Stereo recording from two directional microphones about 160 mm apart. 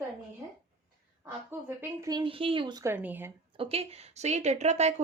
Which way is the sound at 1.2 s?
15° right (ahead or behind).